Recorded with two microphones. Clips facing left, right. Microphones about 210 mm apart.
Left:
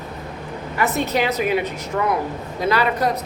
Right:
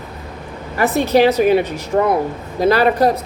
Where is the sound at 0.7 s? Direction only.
35° right (ahead or behind).